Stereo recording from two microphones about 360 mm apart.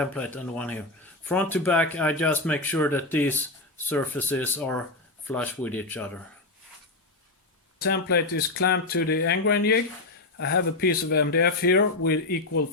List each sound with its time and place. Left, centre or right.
0.0 s speech: centre
7.8 s speech: left